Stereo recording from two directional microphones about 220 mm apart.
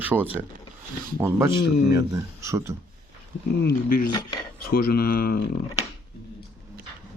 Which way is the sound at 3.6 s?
40° left (ahead or behind).